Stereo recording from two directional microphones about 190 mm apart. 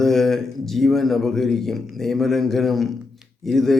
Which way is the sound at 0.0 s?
Centre (ahead or behind).